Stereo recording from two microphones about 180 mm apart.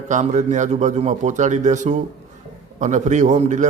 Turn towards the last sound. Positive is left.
turn(degrees=-40)  # may be behind; listen again after turning